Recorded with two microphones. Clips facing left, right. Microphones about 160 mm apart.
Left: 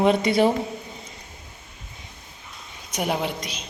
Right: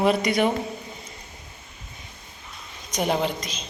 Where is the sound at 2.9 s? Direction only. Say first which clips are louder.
Right 2 dB; 5° left (ahead or behind).